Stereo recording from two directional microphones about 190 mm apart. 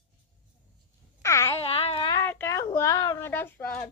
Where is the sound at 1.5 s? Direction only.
30° left (ahead or behind).